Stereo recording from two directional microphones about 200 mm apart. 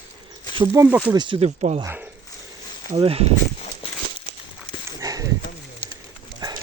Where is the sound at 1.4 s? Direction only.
35° right (ahead or behind).